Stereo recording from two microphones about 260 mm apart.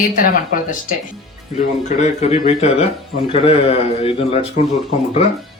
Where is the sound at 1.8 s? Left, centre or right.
Left.